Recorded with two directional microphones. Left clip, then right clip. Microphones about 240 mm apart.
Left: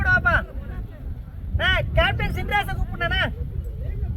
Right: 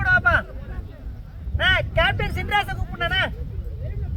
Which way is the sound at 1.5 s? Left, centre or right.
Centre.